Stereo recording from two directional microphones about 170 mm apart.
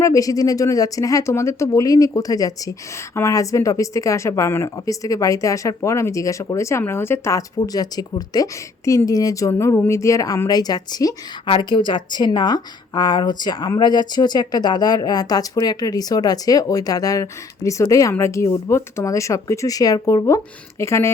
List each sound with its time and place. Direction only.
0.0 s a woman's voice: 20° left (ahead or behind)